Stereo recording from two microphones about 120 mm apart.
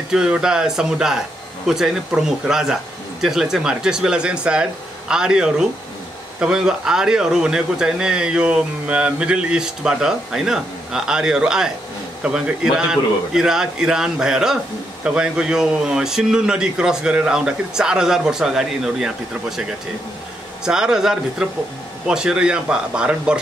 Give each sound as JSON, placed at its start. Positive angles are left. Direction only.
{"t": 0.1, "sound": "speech", "side_deg": -5}
{"t": 20.6, "sound": "speech", "side_deg": -5}